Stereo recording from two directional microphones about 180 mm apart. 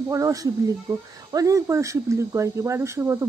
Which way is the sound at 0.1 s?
20° right (ahead or behind).